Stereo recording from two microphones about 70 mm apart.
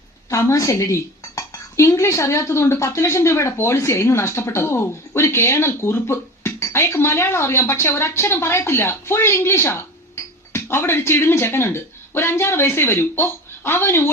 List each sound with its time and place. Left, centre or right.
0.3 s speech: left